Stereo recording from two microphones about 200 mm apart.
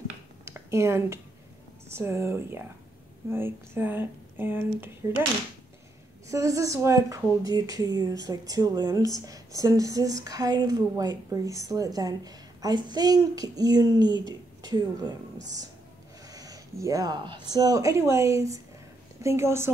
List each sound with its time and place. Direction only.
0.5 s a woman's voice: 15° right (ahead or behind)
6.2 s a woman's voice: 15° right (ahead or behind)
16.3 s a woman's voice: 20° right (ahead or behind)